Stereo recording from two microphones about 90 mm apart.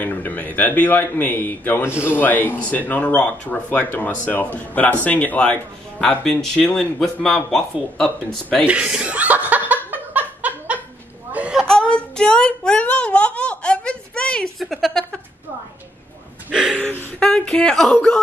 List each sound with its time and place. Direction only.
0.0 s speech: 20° left (ahead or behind)
5.9 s speech: 5° left (ahead or behind)
8.6 s chuckle: 10° right (ahead or behind)
9.8 s snicker: 20° right (ahead or behind)
11.6 s wail: 10° left (ahead or behind)
14.6 s a sound: centre (ahead or behind)
17.2 s speech: 10° left (ahead or behind)